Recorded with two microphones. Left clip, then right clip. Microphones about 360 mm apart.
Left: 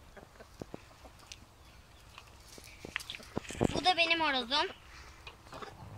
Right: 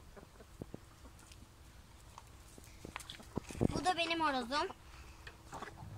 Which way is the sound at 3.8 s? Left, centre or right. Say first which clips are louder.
Left 6 dB; centre.